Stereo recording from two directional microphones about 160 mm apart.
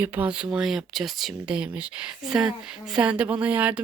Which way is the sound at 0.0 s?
10° right (ahead or behind).